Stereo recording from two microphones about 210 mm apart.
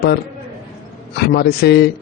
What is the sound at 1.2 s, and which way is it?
Speech, 50° left (ahead or behind).